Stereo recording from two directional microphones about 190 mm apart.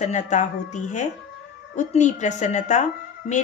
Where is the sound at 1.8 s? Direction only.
40° left (ahead or behind).